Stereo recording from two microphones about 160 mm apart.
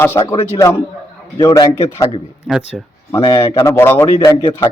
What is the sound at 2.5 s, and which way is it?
Speech, centre (ahead or behind).